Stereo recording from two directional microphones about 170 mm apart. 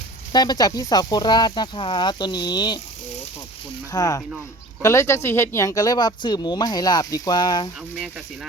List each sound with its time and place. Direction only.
0.3 s speech: 25° left (ahead or behind)
3.9 s speech: 20° left (ahead or behind)